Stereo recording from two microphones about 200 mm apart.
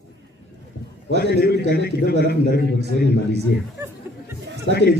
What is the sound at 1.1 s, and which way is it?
Speech, 55° left (ahead or behind).